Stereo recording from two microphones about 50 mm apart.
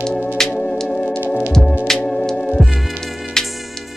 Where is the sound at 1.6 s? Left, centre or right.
Centre.